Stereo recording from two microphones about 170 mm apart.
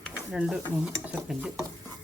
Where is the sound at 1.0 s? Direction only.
5° right (ahead or behind).